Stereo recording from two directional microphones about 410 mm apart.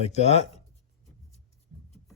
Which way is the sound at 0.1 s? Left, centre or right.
Centre.